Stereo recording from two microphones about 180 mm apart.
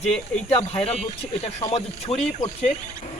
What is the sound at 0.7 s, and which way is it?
Speech, 35° left (ahead or behind).